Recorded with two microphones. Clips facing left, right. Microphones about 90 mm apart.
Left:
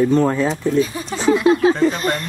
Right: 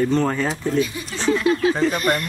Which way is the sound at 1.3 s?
25° left (ahead or behind).